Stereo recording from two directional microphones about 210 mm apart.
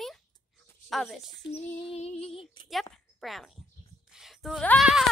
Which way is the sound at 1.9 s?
30° left (ahead or behind).